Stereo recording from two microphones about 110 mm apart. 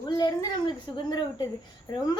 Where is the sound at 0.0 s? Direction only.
40° left (ahead or behind).